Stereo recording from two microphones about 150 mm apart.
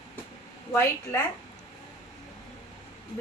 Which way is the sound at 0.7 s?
15° left (ahead or behind).